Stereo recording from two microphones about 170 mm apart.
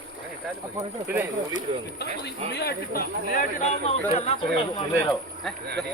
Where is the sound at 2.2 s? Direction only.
75° left (ahead or behind).